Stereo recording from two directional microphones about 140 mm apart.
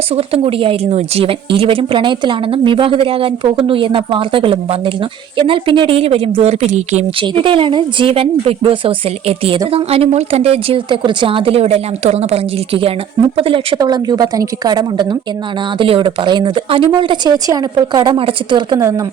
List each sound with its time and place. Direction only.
0.1 s speech: 45° right (ahead or behind)
7.2 s a woman's voice: 40° right (ahead or behind)
13.7 s speech: 30° right (ahead or behind)
18.8 s speech: 20° right (ahead or behind)